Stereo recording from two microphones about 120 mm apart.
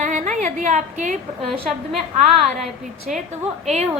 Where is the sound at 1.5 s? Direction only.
Centre (ahead or behind).